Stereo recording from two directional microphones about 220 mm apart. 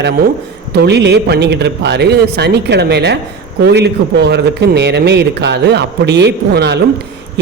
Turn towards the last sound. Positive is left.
turn(degrees=-50)  # may be behind; listen again after turning